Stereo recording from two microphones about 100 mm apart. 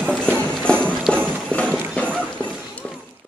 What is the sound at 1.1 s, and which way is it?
Clip-clop, 10° left (ahead or behind).